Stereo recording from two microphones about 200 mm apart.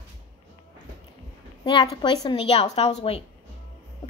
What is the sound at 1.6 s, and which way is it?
A woman's voice, 20° left (ahead or behind).